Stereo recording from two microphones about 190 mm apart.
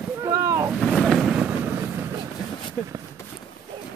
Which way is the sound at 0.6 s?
Centre (ahead or behind).